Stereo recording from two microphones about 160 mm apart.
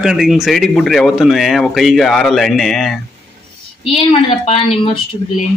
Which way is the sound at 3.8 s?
35° left (ahead or behind).